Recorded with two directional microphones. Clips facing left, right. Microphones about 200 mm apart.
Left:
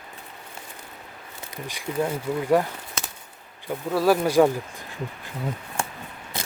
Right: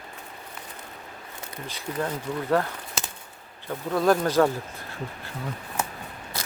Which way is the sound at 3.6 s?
5° left (ahead or behind).